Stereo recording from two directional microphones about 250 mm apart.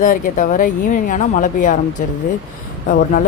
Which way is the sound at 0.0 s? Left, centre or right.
Left.